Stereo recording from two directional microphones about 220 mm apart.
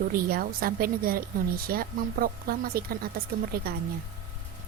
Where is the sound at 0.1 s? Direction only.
40° right (ahead or behind).